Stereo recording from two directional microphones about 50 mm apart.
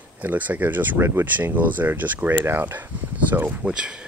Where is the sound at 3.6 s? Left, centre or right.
Right.